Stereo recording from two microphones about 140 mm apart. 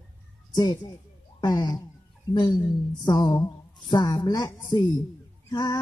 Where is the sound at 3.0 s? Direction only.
30° left (ahead or behind).